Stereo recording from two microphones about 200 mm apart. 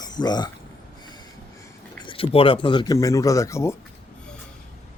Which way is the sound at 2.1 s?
25° left (ahead or behind).